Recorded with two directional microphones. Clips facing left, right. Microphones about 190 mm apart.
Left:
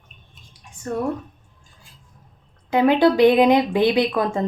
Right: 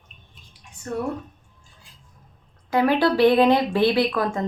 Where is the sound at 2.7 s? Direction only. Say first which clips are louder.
Left 3 dB; 20° left (ahead or behind).